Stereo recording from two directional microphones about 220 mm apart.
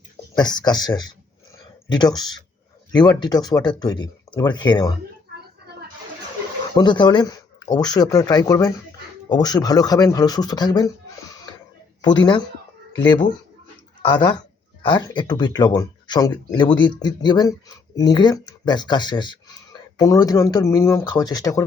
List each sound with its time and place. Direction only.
0.3 s speech: 20° left (ahead or behind)
6.7 s speech: 20° left (ahead or behind)
12.0 s speech: 20° left (ahead or behind)